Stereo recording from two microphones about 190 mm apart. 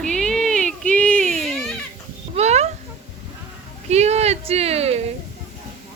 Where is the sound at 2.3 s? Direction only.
35° right (ahead or behind).